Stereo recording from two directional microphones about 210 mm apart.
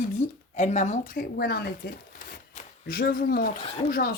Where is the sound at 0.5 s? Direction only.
35° left (ahead or behind); by 1.9 s 50° left (ahead or behind).